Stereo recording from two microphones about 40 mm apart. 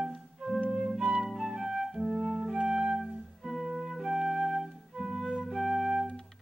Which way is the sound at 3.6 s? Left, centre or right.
Centre.